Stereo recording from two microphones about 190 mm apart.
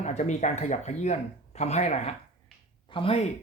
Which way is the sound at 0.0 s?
35° left (ahead or behind).